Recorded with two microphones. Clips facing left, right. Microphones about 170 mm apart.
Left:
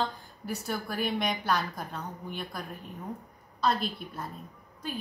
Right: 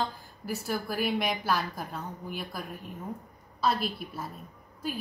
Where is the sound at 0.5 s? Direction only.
Centre (ahead or behind).